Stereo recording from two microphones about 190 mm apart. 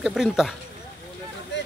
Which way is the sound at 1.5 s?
70° left (ahead or behind).